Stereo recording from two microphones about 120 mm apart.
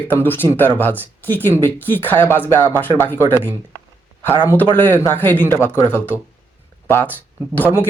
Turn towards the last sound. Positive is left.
turn(degrees=20)  # may be behind; listen again after turning